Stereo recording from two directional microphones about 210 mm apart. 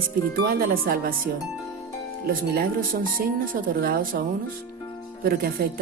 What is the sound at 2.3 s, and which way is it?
Speech, 45° right (ahead or behind).